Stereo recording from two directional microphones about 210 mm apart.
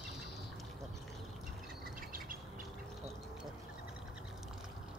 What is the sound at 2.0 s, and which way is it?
Insect, 40° right (ahead or behind).